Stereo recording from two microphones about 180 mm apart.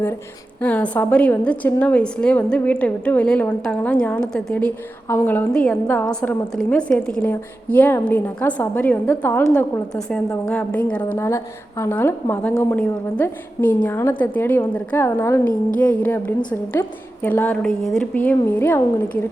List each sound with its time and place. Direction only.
0.6 s a woman's voice: 5° left (ahead or behind)
12.8 s a woman's voice: 5° left (ahead or behind)